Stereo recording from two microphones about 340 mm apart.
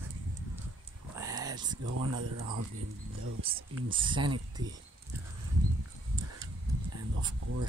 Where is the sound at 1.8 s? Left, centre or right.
Right.